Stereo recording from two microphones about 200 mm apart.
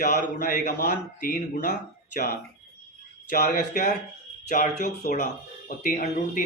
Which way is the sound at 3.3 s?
40° left (ahead or behind).